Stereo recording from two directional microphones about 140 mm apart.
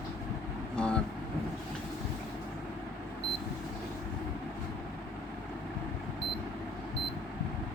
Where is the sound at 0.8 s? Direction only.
5° left (ahead or behind).